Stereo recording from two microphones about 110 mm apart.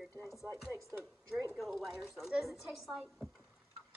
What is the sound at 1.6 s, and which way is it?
A woman's voice, centre (ahead or behind).